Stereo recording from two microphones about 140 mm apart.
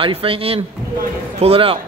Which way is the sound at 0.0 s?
40° right (ahead or behind).